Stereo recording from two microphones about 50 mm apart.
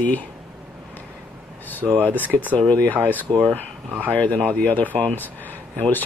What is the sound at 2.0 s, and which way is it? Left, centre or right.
Speech, left.